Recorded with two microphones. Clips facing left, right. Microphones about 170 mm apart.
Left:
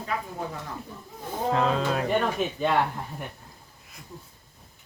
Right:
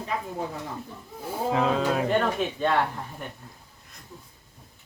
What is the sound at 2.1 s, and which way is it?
Speech, 10° left (ahead or behind).